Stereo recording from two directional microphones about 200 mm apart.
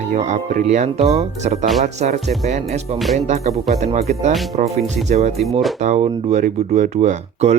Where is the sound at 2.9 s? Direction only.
Centre (ahead or behind).